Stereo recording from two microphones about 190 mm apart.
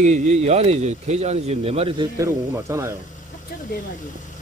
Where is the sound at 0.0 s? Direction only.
35° right (ahead or behind).